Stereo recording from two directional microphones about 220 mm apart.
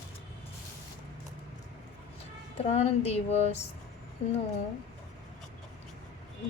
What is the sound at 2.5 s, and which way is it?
A woman's voice, 30° left (ahead or behind).